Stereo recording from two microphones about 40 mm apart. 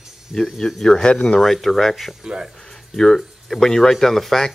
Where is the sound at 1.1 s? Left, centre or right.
Left.